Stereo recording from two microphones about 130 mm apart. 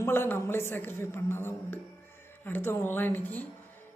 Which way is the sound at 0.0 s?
20° left (ahead or behind).